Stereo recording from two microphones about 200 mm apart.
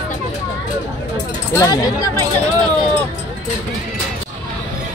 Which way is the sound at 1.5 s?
20° left (ahead or behind).